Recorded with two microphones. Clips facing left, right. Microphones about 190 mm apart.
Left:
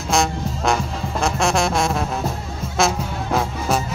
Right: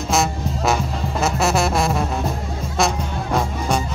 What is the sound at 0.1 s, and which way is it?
Music, centre (ahead or behind).